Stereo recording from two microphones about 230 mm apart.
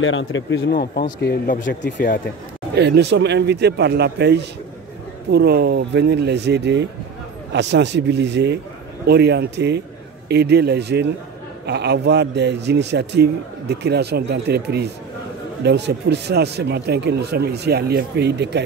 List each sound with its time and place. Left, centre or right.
0.0 s speech: left
0.7 s speech: left
2.7 s a man's voice: right